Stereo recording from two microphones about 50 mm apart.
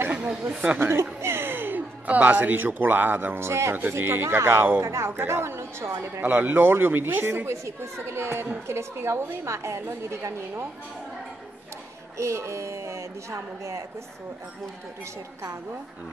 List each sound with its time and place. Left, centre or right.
0.1 s chatter: centre
0.7 s a woman's voice: right
1.2 s a sound: right
2.0 s speech: right
3.3 s a woman's voice: right
3.9 s speech: right
4.8 s speech: right
5.3 s a woman's voice: right
6.2 s speech: right
7.4 s a woman's voice: right
9.8 s a woman's voice: right
12.2 s speech: right